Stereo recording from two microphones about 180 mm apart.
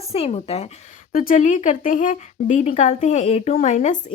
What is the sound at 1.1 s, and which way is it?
Speech, 50° left (ahead or behind).